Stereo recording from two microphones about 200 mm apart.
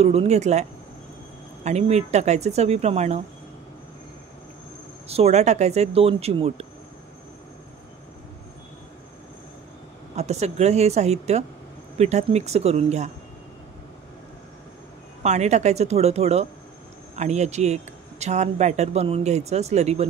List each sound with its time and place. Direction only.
0.0 s speech: 30° right (ahead or behind)
5.0 s speech: 30° right (ahead or behind)
10.1 s speech: 35° right (ahead or behind)
15.2 s speech: 35° right (ahead or behind)